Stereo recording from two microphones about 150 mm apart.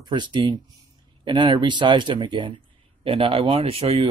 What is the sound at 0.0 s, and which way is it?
Speech, 30° right (ahead or behind).